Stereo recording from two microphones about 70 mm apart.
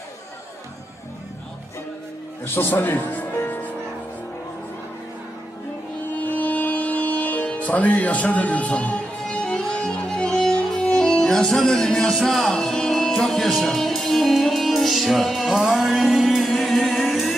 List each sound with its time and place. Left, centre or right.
2.4 s speech: left
6.1 s music: left; by 17.3 s centre